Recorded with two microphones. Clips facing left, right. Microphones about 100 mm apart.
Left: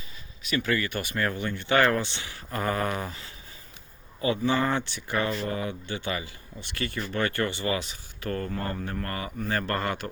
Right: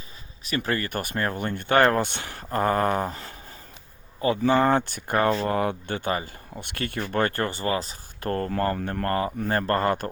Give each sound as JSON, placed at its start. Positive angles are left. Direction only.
{"t": 0.4, "sound": "speech", "side_deg": -40}
{"t": 6.5, "sound": "speech", "side_deg": -55}
{"t": 8.4, "sound": "speech", "side_deg": -65}